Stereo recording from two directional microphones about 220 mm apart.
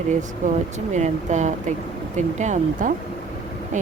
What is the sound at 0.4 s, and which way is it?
Speech, 35° right (ahead or behind).